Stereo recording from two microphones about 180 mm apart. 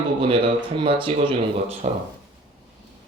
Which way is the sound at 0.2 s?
30° right (ahead or behind).